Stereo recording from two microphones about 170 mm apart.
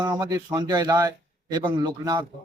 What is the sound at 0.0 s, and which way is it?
Speech, 20° right (ahead or behind).